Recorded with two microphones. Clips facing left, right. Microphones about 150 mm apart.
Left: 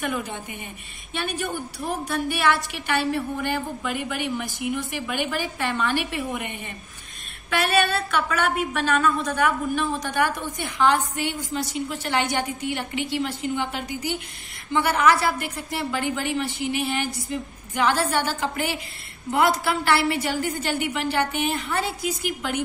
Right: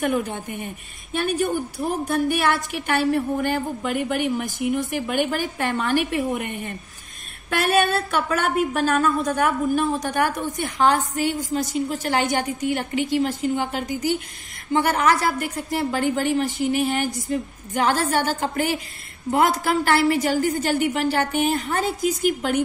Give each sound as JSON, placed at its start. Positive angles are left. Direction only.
{"t": 0.0, "sound": "speech", "side_deg": -45}